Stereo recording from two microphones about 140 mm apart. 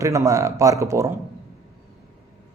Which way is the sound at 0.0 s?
25° right (ahead or behind).